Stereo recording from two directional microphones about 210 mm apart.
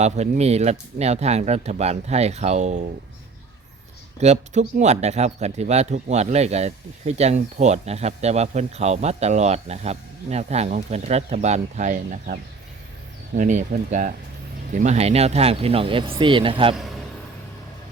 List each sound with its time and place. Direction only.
0.0 s speech: 30° right (ahead or behind)
4.2 s speech: 30° right (ahead or behind)